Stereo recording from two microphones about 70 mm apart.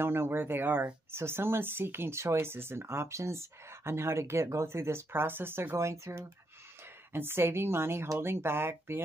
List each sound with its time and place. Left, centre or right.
0.0 s speech: right